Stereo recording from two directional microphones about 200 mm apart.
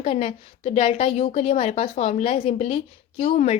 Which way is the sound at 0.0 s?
30° left (ahead or behind).